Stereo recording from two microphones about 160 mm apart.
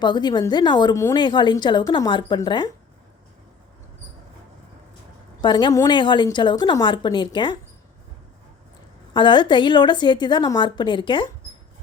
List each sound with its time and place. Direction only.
0.0 s a woman's voice: 25° left (ahead or behind)
5.4 s a woman's voice: 30° left (ahead or behind)
9.1 s a woman's voice: 30° left (ahead or behind)